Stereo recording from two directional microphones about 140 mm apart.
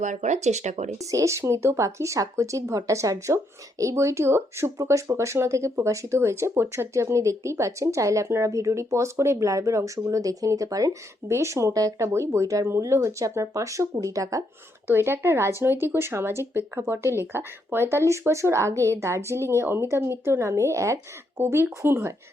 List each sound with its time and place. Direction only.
0.0 s speech: 60° right (ahead or behind)
0.9 s speech: 20° right (ahead or behind)